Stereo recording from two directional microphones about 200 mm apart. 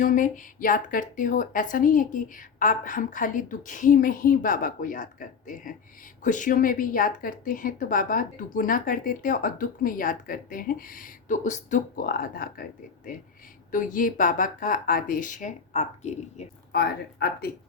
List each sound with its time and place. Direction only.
0.0 s a woman's voice: 40° left (ahead or behind)
16.7 s a woman's voice: 50° left (ahead or behind)